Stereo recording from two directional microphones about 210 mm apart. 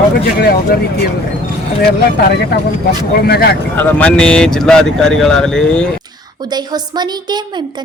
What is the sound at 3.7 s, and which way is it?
Speech, 10° left (ahead or behind).